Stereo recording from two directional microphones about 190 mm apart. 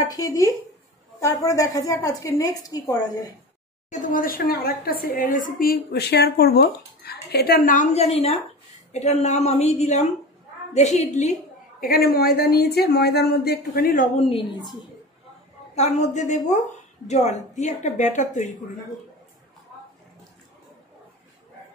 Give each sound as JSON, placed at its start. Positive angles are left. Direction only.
{"t": 0.0, "sound": "a woman's voice", "side_deg": 20}
{"t": 3.9, "sound": "a woman's voice", "side_deg": 45}
{"t": 11.8, "sound": "a woman's voice", "side_deg": 50}
{"t": 14.1, "sound": "a woman's voice", "side_deg": 30}
{"t": 15.7, "sound": "a woman's voice", "side_deg": 35}